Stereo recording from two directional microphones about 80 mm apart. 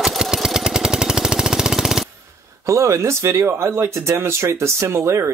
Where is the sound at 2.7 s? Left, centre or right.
Right.